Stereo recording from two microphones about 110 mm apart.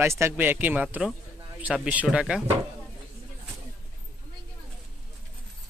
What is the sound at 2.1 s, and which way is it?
Speech, 5° right (ahead or behind).